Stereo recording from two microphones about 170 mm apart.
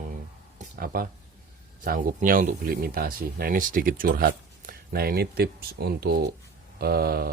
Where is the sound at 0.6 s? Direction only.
55° right (ahead or behind).